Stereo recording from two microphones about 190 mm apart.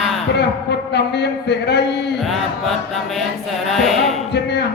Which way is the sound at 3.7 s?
Centre (ahead or behind).